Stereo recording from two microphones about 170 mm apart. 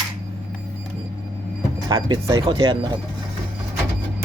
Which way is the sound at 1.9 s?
25° right (ahead or behind).